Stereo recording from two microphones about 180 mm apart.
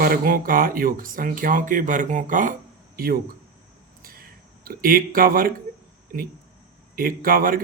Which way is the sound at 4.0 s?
55° right (ahead or behind).